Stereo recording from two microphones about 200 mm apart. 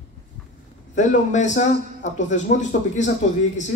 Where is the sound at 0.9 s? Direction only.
35° left (ahead or behind).